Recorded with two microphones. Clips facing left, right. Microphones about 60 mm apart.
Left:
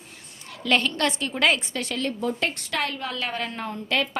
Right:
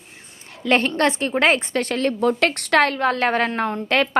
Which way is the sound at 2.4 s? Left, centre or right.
Right.